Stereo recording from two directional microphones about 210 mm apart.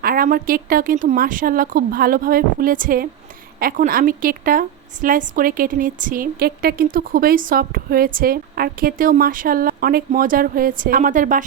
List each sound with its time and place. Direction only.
0.0 s a woman's voice: 45° right (ahead or behind)